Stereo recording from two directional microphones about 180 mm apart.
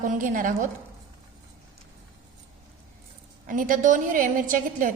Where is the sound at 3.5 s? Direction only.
50° right (ahead or behind).